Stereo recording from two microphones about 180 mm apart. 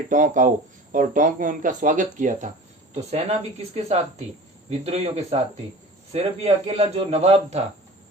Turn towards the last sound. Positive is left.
turn(degrees=-35)  # may be behind; listen again after turning